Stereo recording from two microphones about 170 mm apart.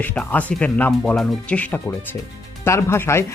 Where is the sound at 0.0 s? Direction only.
10° left (ahead or behind).